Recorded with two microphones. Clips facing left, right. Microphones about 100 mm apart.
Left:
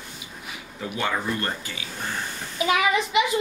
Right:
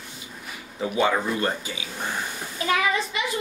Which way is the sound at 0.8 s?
15° right (ahead or behind).